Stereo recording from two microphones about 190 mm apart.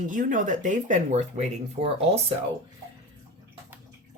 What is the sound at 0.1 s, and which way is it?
Speech, 45° right (ahead or behind).